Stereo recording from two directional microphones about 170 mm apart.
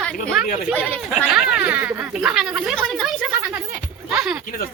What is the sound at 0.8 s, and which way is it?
Speech, 10° left (ahead or behind).